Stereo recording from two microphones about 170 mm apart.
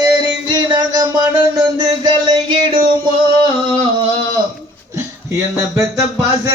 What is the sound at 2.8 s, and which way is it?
Music, 25° right (ahead or behind).